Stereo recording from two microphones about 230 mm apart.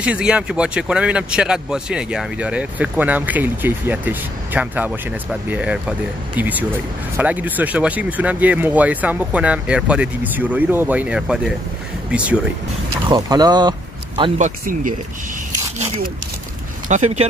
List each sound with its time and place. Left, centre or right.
0.0 s speech: centre
13.1 s speech: centre
14.4 s speech: right
16.8 s speech: right